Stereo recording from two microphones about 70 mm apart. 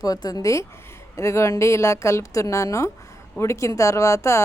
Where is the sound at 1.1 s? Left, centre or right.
Left.